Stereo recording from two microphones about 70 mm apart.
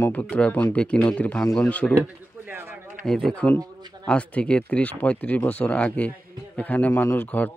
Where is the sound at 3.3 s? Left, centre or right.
Centre.